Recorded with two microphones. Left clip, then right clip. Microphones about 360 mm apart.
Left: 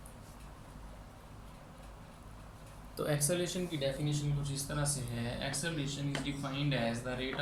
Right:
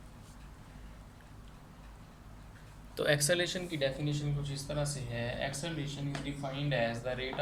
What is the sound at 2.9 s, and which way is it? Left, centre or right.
Speech, right.